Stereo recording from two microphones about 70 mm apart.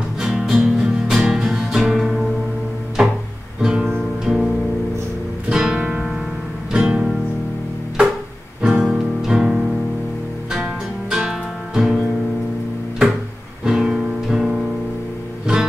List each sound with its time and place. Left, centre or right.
0.2 s music: centre
3.6 s music: centre
8.6 s music: centre
13.7 s music: centre